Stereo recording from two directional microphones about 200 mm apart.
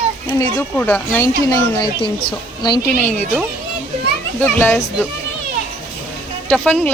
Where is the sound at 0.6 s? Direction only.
10° left (ahead or behind).